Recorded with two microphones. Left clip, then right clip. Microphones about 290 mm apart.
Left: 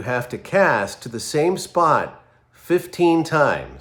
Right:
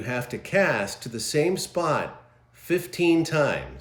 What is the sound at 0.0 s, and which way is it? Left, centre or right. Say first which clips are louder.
Speech: left 6 dB; centre.